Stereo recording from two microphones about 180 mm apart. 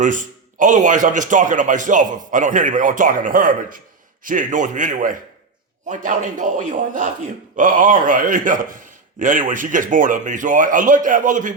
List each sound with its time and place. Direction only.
0.0 s a man's voice: 45° right (ahead or behind)